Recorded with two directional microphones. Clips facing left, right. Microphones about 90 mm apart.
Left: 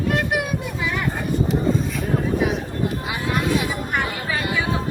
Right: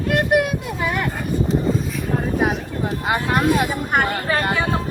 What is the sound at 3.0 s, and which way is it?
Speech, 55° right (ahead or behind).